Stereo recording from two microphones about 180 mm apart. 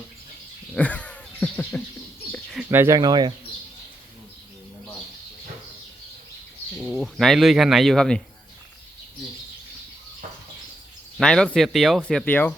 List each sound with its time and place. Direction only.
0.7 s a sound: 5° left (ahead or behind)
2.3 s bird: 5° left (ahead or behind)
2.6 s speech: 15° right (ahead or behind)
6.9 s speech: centre (ahead or behind)
11.2 s speech: 5° left (ahead or behind)